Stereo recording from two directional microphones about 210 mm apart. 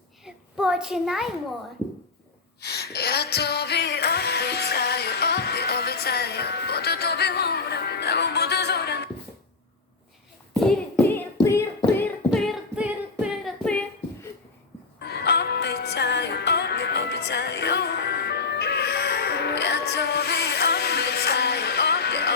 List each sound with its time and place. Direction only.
0.3 s a sound: 5° right (ahead or behind)
2.6 s music: 50° left (ahead or behind)
10.6 s hands: 5° left (ahead or behind)
11.1 s singing: 10° left (ahead or behind)
12.3 s singing: centre (ahead or behind)
15.0 s music: 50° left (ahead or behind)